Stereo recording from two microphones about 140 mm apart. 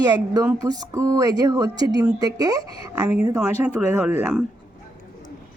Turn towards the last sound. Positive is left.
turn(degrees=-15)  # may be behind; listen again after turning